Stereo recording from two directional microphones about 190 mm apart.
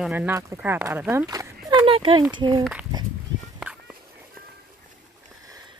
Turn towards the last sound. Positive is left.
turn(degrees=-5)  # may be behind; listen again after turning